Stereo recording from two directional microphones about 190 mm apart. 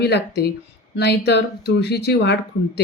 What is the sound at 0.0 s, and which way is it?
Speech, 60° left (ahead or behind).